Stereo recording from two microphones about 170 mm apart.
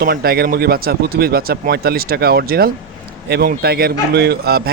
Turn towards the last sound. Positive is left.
turn(degrees=-65)  # may be behind; listen again after turning